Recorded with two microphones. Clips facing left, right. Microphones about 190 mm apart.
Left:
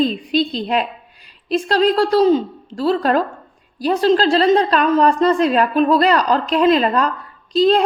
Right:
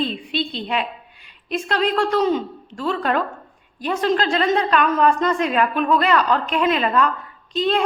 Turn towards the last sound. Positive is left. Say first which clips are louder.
# left 7 dB
turn(degrees=35)  # may be behind; listen again after turning